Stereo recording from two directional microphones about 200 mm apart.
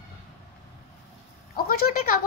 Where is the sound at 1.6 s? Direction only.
50° left (ahead or behind).